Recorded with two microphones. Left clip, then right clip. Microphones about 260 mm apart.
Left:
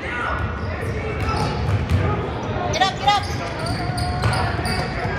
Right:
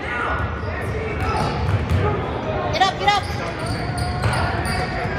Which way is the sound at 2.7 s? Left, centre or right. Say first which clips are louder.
Even; right.